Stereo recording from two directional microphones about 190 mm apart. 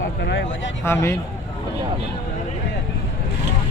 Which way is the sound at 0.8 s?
15° left (ahead or behind).